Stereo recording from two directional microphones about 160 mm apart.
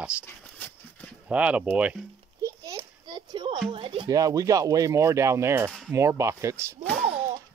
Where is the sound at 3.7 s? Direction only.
30° right (ahead or behind); by 5.7 s 15° right (ahead or behind).